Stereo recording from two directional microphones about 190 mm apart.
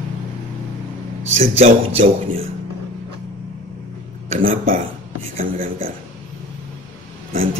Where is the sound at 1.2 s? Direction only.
35° right (ahead or behind).